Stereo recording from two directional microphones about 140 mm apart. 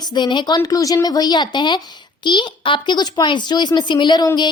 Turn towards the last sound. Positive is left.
turn(degrees=30)  # may be behind; listen again after turning